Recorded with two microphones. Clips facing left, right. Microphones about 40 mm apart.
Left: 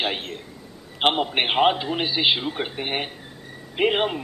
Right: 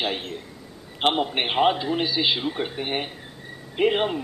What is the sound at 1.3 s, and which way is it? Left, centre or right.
A man's voice, left.